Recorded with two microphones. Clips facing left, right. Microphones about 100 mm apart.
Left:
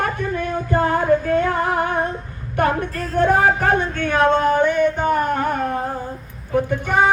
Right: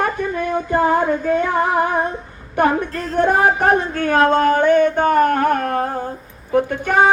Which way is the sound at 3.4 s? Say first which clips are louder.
Right 2 dB; 25° right (ahead or behind).